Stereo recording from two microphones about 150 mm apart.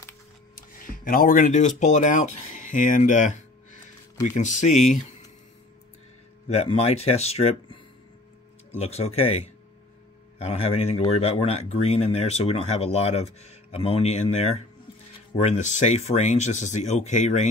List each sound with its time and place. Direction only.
0.6 s speech: 75° left (ahead or behind); by 5.0 s 55° left (ahead or behind)
6.5 s speech: 45° left (ahead or behind)